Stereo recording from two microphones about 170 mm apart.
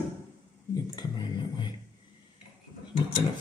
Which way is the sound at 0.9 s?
25° left (ahead or behind).